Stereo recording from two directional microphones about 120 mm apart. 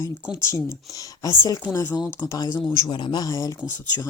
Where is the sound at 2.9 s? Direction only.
40° left (ahead or behind).